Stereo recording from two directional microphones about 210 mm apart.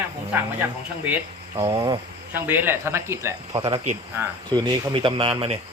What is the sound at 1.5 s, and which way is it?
Speech, 25° right (ahead or behind).